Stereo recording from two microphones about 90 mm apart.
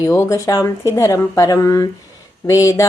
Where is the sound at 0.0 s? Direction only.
35° left (ahead or behind).